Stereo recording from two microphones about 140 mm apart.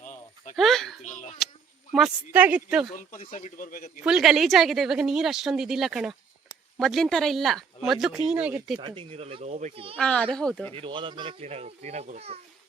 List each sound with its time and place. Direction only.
0.5 s speech: centre (ahead or behind)
1.0 s speech: 65° left (ahead or behind)
1.9 s a woman's voice: 5° right (ahead or behind)
3.2 s speech: 70° left (ahead or behind); by 3.8 s 85° left
4.0 s speech: 5° right (ahead or behind)
8.8 s speech: 40° right (ahead or behind); by 9.8 s 55° right (ahead or behind)
10.0 s a child's voice: 10° left (ahead or behind)
10.8 s speech: 35° right (ahead or behind)